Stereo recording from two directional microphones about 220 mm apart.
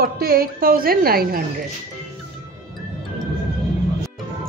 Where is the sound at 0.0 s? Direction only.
40° right (ahead or behind).